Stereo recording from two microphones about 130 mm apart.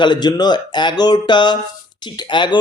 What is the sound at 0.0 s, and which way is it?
Speech, 35° left (ahead or behind).